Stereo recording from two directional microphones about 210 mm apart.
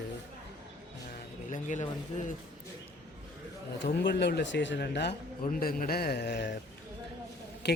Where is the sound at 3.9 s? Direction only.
55° left (ahead or behind).